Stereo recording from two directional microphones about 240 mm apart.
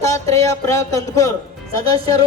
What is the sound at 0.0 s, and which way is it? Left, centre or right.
A woman's voice, centre.